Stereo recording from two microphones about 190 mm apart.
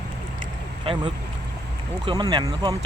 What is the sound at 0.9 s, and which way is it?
Speech, 30° right (ahead or behind).